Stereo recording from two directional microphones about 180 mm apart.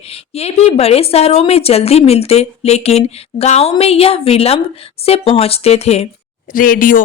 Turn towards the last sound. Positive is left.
turn(degrees=50)  # may be behind; listen again after turning